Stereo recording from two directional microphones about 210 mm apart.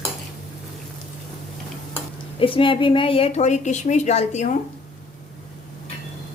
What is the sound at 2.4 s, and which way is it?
A woman's voice, 25° left (ahead or behind).